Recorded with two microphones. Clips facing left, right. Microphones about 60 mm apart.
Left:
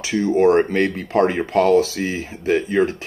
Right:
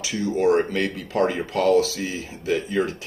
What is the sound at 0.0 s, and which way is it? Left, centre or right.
Speech, left.